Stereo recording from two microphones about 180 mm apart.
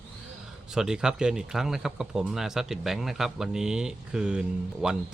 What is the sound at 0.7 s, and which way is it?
Speech, 5° right (ahead or behind).